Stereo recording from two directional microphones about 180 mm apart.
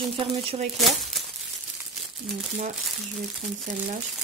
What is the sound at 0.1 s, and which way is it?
Speech, 30° right (ahead or behind).